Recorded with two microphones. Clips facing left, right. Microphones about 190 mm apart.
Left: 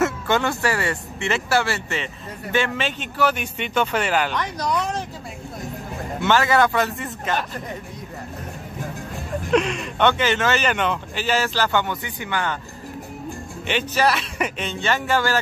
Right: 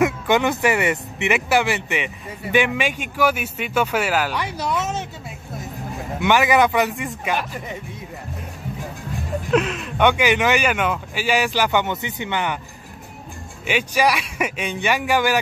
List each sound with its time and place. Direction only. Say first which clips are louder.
0.0 s speech: right 3 dB; 15° right (ahead or behind)
6.2 s speech: right 2 dB; 15° right (ahead or behind)
9.5 s speech: even; 5° right (ahead or behind); by 12.5 s 20° right (ahead or behind)
13.7 s speech: right 1 dB; 10° right (ahead or behind)